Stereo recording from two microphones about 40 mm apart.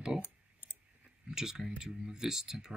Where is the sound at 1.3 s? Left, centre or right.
Centre.